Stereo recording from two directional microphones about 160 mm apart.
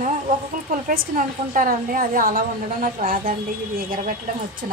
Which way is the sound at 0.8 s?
65° right (ahead or behind).